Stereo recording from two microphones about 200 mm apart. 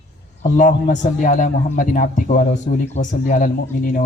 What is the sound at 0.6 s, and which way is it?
A man's voice, 40° left (ahead or behind).